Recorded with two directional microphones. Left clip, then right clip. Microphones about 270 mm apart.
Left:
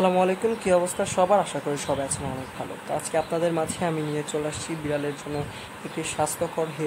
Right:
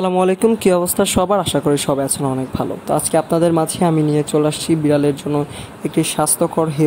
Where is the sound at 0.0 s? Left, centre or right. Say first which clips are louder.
Right 6 dB; right.